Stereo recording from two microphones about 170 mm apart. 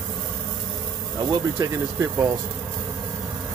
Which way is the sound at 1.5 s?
15° right (ahead or behind).